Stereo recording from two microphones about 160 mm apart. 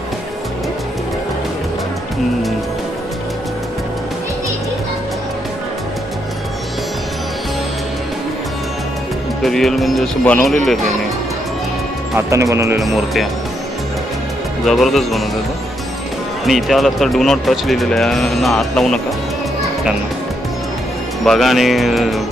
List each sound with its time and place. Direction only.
9.4 s speech: centre (ahead or behind)
12.1 s speech: 20° right (ahead or behind)
12.8 s speech: centre (ahead or behind)
14.7 s speech: centre (ahead or behind)
16.5 s speech: centre (ahead or behind)
21.2 s speech: centre (ahead or behind)